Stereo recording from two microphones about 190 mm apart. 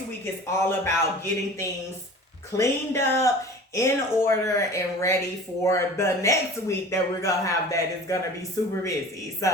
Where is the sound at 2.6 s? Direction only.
15° left (ahead or behind).